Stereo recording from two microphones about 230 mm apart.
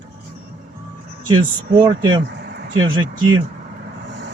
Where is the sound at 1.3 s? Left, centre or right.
Centre.